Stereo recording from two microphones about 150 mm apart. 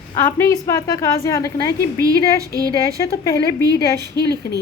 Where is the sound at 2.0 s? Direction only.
25° right (ahead or behind).